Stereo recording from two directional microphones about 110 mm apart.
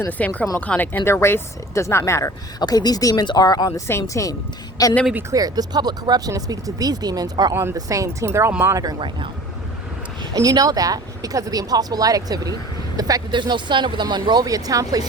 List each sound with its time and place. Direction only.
0.1 s speech: 15° left (ahead or behind)
2.6 s speech: 35° left (ahead or behind)
5.3 s speech: 35° right (ahead or behind)
7.5 s speech: 25° right (ahead or behind)
9.0 s speech: 50° right (ahead or behind)
10.3 s speech: 35° right (ahead or behind)